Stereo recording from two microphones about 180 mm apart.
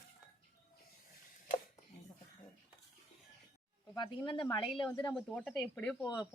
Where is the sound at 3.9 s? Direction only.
25° left (ahead or behind).